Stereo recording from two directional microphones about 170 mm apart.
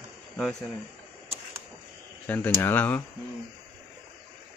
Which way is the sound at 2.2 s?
10° left (ahead or behind).